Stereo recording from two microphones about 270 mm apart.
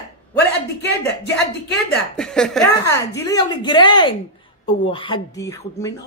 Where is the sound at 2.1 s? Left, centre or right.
Centre.